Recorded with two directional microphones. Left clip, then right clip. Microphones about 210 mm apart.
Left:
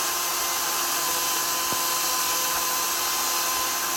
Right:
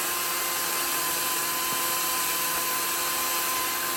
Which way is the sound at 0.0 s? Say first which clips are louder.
Left 2 dB; 20° left (ahead or behind).